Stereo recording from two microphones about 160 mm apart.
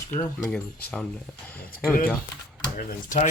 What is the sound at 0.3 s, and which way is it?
Speech, 5° left (ahead or behind).